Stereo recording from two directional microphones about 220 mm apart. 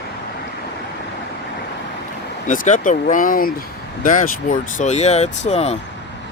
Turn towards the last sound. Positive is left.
turn(degrees=30)  # may be behind; listen again after turning